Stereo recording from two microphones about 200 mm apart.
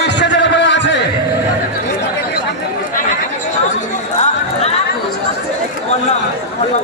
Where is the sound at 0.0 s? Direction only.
60° left (ahead or behind).